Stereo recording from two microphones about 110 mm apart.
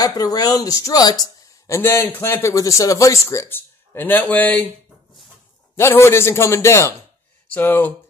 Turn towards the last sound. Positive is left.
turn(degrees=20)  # may be behind; listen again after turning